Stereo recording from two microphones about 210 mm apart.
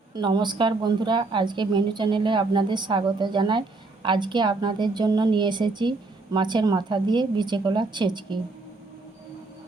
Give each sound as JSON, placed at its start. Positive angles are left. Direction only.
{"t": 0.1, "sound": "a woman's voice", "side_deg": -20}